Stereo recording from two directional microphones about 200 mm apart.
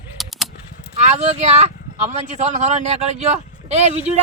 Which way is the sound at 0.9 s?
35° right (ahead or behind).